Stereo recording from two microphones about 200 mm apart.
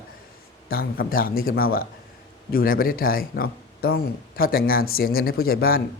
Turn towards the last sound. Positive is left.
turn(degrees=50)  # may be behind; listen again after turning